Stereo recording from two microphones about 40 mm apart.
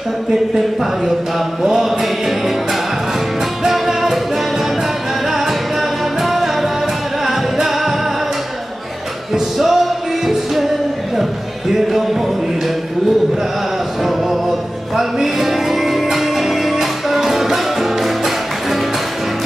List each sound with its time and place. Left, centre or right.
1.6 s music: centre
3.6 s music: centre
5.3 s music: centre
9.3 s music: centre
15.0 s music: centre